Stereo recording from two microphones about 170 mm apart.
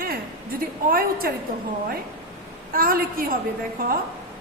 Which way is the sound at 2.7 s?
55° right (ahead or behind).